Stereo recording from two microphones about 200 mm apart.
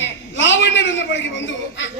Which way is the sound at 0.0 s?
65° left (ahead or behind).